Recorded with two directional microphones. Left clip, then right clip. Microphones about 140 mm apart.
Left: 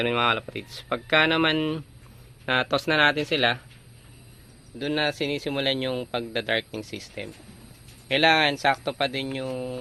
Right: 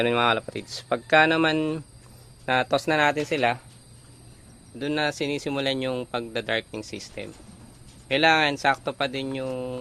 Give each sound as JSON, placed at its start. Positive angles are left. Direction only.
{"t": 0.0, "sound": "speech", "side_deg": -30}
{"t": 4.8, "sound": "speech", "side_deg": -20}